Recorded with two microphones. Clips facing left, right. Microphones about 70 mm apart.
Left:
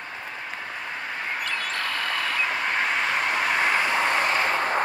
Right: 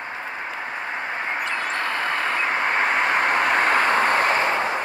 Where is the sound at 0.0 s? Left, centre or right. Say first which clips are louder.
Right 5 dB; right.